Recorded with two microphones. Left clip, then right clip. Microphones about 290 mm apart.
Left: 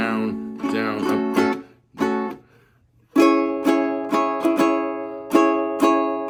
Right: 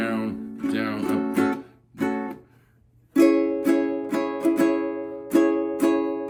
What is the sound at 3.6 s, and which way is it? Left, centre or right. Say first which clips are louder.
Music: left 3 dB; centre.